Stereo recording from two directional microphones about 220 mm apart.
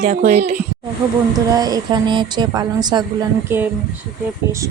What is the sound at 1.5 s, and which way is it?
Speech, 15° right (ahead or behind).